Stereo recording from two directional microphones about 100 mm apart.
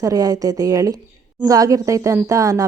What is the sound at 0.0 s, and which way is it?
A woman's voice, 35° right (ahead or behind).